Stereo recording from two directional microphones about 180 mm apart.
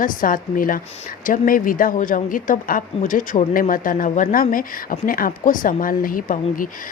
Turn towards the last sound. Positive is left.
turn(degrees=50)  # may be behind; listen again after turning